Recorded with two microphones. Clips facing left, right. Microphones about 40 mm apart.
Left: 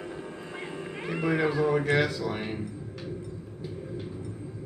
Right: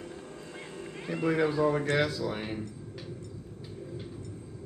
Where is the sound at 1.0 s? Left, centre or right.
Left.